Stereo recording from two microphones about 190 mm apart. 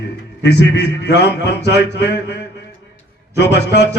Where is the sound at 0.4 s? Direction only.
65° left (ahead or behind).